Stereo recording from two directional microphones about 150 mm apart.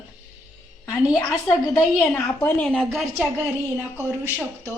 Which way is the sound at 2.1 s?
10° left (ahead or behind).